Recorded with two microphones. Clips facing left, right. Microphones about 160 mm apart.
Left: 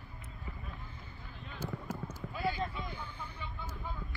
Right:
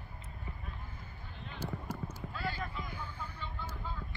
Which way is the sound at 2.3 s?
15° left (ahead or behind).